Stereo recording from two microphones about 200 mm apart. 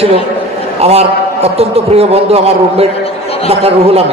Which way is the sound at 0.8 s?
30° right (ahead or behind).